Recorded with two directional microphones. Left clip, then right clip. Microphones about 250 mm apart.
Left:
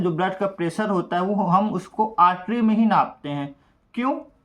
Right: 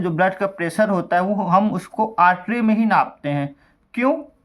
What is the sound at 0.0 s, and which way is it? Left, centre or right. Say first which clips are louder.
Speech: right 4 dB; right.